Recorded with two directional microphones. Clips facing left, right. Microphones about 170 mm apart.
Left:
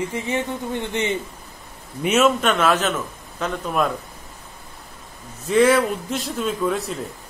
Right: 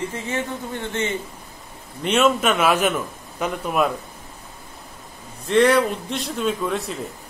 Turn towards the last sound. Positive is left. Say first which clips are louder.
# left 1 dB
turn(degrees=0)  # may be behind; listen again after turning